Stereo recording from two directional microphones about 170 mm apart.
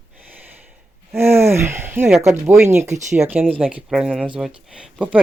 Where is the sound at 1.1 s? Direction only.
15° right (ahead or behind).